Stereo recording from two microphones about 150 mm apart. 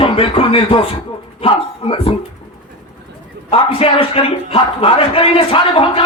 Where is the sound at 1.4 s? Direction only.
40° left (ahead or behind).